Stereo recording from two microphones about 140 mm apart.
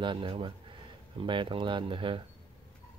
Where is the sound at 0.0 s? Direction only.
35° right (ahead or behind).